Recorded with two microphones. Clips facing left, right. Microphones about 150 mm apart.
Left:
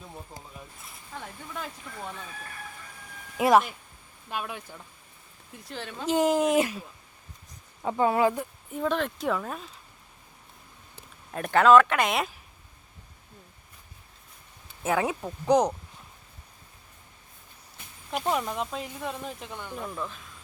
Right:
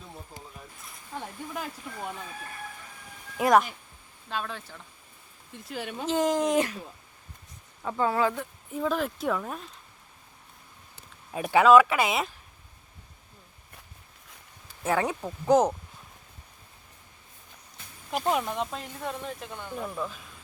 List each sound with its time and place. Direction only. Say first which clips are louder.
1.5 s speech: even; 5° right (ahead or behind)
3.3 s speech: left 1 dB; 5° left (ahead or behind)
4.3 s speech: even; 15° left (ahead or behind)
5.6 s speech: right 3 dB; 10° right (ahead or behind)
6.1 s speech: left 2 dB; 10° left (ahead or behind)
7.8 s speech: left 3 dB; 20° left (ahead or behind)
8.7 s speech: even; centre (ahead or behind)
11.3 s speech: even; 5° right (ahead or behind)
14.8 s speech: even; 5° left (ahead or behind)
18.1 s speech: right 1 dB; centre (ahead or behind)